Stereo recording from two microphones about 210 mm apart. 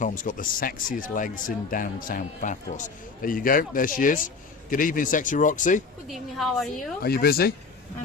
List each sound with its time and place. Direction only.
0.0 s speech: 40° left (ahead or behind)
6.1 s a woman's voice: centre (ahead or behind)
7.0 s speech: 45° left (ahead or behind)